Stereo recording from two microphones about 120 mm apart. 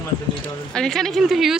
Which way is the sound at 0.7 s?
5° left (ahead or behind).